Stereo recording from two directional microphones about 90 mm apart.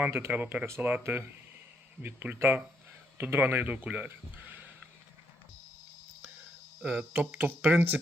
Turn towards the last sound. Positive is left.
turn(degrees=-20)  # may be behind; listen again after turning